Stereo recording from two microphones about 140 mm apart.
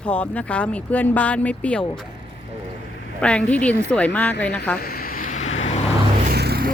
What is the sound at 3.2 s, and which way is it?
Speech, 10° left (ahead or behind).